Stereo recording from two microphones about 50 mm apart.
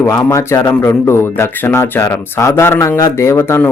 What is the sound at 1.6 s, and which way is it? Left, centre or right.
Speech, left.